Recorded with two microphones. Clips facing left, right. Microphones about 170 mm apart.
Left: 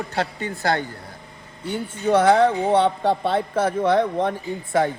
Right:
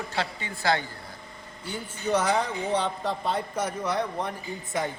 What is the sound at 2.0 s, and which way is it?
Speech, 55° left (ahead or behind).